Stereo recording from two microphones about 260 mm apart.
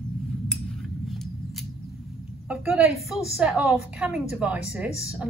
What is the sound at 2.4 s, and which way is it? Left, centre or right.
A woman's voice, centre.